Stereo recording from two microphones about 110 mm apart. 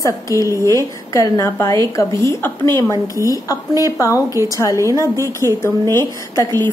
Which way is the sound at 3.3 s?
35° left (ahead or behind).